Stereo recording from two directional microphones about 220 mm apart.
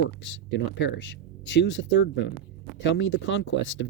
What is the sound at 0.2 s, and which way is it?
Speech, 60° left (ahead or behind).